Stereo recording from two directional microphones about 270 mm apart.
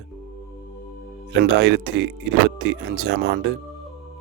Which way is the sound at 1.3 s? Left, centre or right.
Right.